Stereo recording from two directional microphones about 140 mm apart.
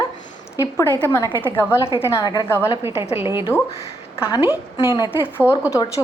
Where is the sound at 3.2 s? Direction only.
15° right (ahead or behind).